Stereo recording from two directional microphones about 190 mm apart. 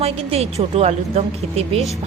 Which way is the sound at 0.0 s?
30° right (ahead or behind).